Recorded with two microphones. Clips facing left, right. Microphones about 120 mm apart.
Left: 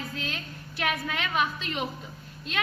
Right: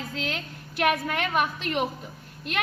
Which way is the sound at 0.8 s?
50° right (ahead or behind).